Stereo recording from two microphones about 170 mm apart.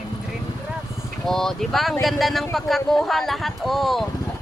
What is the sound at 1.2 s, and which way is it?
A man's voice, centre (ahead or behind).